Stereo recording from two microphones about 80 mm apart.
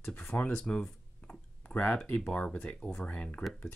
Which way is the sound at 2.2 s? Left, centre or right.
Centre.